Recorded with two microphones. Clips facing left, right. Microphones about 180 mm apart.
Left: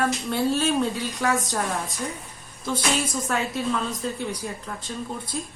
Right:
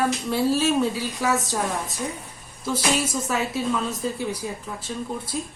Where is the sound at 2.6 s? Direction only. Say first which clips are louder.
Right 2 dB; 5° right (ahead or behind).